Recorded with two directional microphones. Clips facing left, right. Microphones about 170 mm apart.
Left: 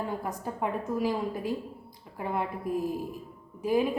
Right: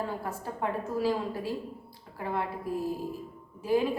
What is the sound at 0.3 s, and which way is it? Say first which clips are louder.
Speech: left 1 dB; 15° left (ahead or behind).